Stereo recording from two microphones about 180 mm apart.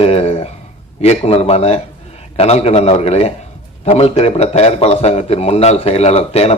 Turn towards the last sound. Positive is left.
turn(degrees=35)  # may be behind; listen again after turning